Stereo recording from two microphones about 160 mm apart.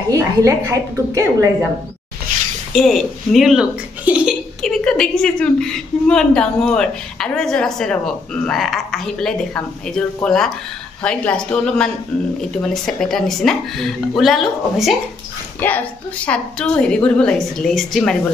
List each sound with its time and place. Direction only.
0.1 s a woman's voice: 20° right (ahead or behind)
2.7 s speech: centre (ahead or behind)
4.6 s a woman's voice: 5° left (ahead or behind)
15.6 s a woman's voice: 10° left (ahead or behind)